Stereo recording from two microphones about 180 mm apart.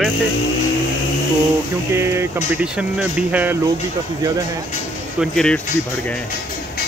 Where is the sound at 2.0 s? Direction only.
15° right (ahead or behind).